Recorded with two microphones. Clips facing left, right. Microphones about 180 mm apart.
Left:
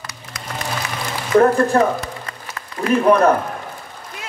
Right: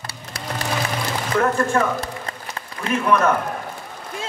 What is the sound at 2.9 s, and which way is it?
Speech, 35° left (ahead or behind).